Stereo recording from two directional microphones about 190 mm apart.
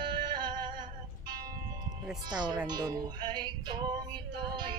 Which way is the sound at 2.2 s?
20° right (ahead or behind).